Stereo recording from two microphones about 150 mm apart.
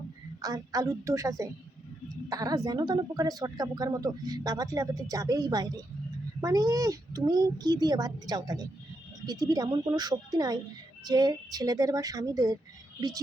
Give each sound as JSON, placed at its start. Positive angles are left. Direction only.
{"t": 0.4, "sound": "speech", "side_deg": -25}